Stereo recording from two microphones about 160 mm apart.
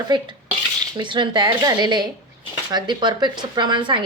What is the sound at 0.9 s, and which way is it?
A woman's voice, 30° right (ahead or behind).